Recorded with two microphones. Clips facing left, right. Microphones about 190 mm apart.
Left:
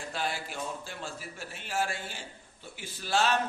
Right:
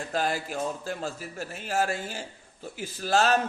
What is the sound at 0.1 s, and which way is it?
Speech, 40° right (ahead or behind).